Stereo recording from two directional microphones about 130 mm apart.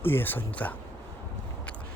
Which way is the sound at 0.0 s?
15° left (ahead or behind).